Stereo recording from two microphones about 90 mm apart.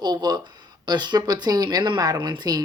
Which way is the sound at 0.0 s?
50° right (ahead or behind).